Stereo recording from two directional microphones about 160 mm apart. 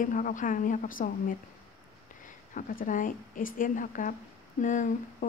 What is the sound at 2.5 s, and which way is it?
A woman's voice, 55° left (ahead or behind).